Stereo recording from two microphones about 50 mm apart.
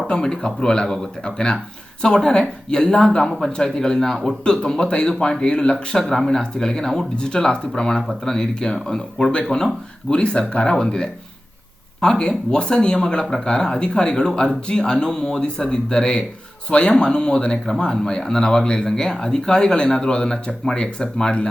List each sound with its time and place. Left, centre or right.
0.1 s speech: centre